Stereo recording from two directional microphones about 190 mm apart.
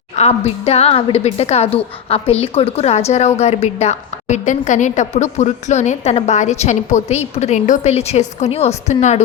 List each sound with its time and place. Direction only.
0.2 s a woman's voice: 35° left (ahead or behind)